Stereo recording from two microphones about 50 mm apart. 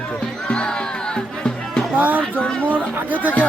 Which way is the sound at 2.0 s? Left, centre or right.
Right.